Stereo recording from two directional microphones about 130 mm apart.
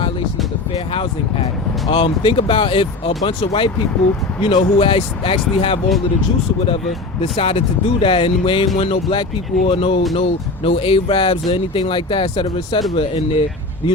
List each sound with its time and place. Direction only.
0.7 s speech: 50° left (ahead or behind)
7.2 s speech: 50° left (ahead or behind)